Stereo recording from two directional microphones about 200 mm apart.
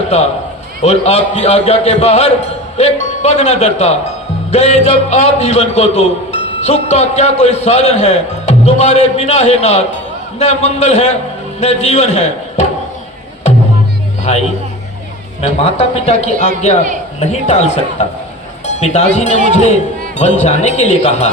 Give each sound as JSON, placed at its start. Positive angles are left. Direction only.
{"t": 0.8, "sound": "a man's voice", "side_deg": 35}
{"t": 14.3, "sound": "a man's voice", "side_deg": 30}